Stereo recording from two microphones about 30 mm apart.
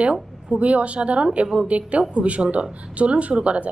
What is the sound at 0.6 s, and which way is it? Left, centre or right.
A woman's voice, right.